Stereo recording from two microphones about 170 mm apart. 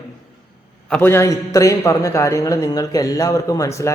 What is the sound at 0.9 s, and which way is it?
A man's voice, 10° left (ahead or behind).